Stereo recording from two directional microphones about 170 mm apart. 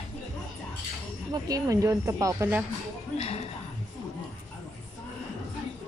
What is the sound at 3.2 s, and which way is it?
Speech, 35° left (ahead or behind).